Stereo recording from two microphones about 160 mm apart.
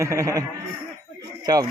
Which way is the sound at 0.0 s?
20° right (ahead or behind).